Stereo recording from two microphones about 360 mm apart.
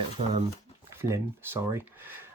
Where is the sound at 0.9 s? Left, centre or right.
Centre.